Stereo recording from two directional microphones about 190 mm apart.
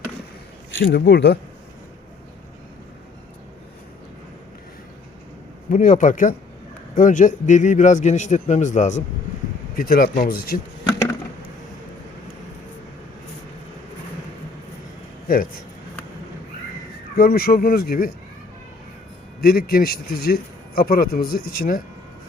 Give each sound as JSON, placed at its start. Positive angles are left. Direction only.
{"t": 0.8, "sound": "speech", "side_deg": 65}
{"t": 5.7, "sound": "a man's voice", "side_deg": 40}
{"t": 15.3, "sound": "a man's voice", "side_deg": 45}
{"t": 17.2, "sound": "a man's voice", "side_deg": 50}
{"t": 19.4, "sound": "a man's voice", "side_deg": 50}